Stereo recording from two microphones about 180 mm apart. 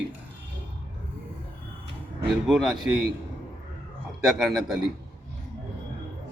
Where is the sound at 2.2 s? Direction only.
Centre (ahead or behind).